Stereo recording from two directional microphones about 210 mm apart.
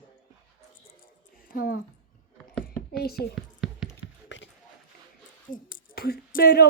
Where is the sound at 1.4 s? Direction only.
45° left (ahead or behind).